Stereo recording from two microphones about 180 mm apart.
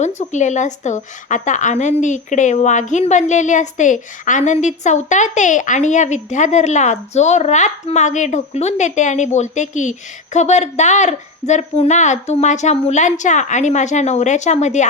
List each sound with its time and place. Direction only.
0.0 s a woman's voice: 40° left (ahead or behind)